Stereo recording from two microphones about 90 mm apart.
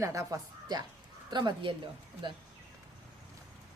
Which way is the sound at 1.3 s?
55° right (ahead or behind).